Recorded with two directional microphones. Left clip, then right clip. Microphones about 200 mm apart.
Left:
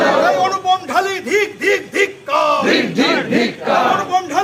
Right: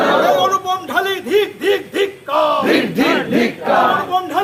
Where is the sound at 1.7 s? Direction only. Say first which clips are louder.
Left 1 dB; 40° left (ahead or behind).